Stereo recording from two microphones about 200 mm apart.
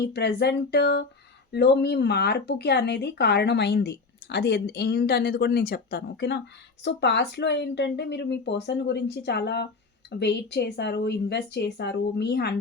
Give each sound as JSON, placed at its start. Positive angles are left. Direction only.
{"t": 0.0, "sound": "speech", "side_deg": 55}